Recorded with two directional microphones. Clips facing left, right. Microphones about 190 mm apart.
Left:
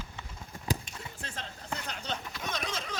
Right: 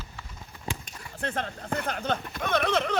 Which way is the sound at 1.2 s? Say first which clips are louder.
Right 15 dB; 60° right (ahead or behind).